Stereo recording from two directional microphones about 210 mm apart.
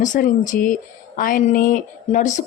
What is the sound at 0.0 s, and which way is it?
Speech, 40° left (ahead or behind).